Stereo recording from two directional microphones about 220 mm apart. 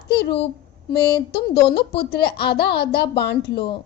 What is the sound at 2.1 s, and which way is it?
A woman's voice, 45° left (ahead or behind).